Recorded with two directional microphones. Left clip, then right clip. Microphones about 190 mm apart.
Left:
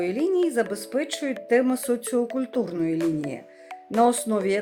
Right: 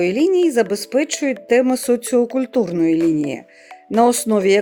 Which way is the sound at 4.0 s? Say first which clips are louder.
Right 6 dB; 50° right (ahead or behind).